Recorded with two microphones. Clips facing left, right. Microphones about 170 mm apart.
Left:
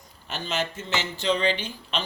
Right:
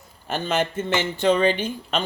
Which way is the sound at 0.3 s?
50° right (ahead or behind).